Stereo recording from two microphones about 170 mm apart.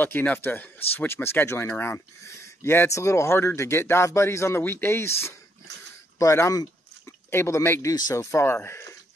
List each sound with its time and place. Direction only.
0.0 s speech: 10° left (ahead or behind)